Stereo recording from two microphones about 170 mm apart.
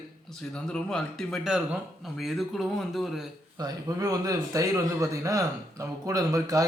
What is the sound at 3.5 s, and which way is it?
A man's voice, 20° right (ahead or behind).